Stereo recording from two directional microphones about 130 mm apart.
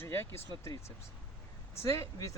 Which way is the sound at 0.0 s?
15° left (ahead or behind).